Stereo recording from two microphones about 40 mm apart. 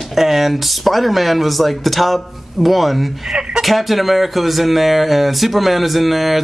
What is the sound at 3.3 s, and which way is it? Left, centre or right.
Speech, centre.